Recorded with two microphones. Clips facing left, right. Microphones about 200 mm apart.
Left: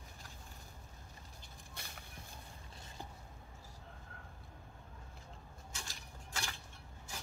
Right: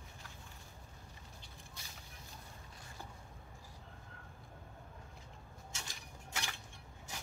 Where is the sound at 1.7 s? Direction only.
55° left (ahead or behind).